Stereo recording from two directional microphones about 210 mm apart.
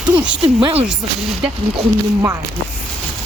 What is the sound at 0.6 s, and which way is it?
Speech, 25° right (ahead or behind).